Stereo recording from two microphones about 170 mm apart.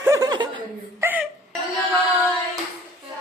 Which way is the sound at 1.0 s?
10° right (ahead or behind).